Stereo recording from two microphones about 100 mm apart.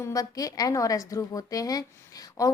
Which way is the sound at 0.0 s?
35° left (ahead or behind).